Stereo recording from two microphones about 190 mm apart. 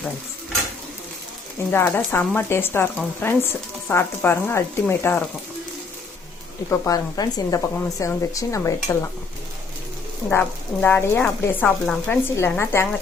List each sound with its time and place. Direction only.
1.7 s speech: 10° left (ahead or behind)
6.7 s speech: 15° left (ahead or behind)
10.2 s speech: 10° left (ahead or behind)